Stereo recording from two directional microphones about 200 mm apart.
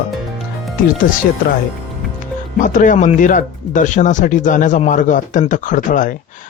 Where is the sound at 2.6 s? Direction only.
40° left (ahead or behind).